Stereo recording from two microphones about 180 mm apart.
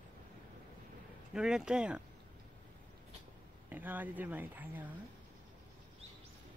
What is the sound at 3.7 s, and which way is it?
Speech, 10° right (ahead or behind).